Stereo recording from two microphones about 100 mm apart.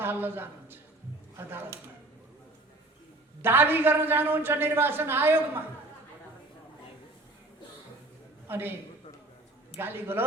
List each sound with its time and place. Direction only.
0.0 s a woman's voice: 20° right (ahead or behind)
3.4 s a man's voice: 20° right (ahead or behind)
8.4 s a man's voice: 20° right (ahead or behind)
9.7 s a man's voice: 20° right (ahead or behind)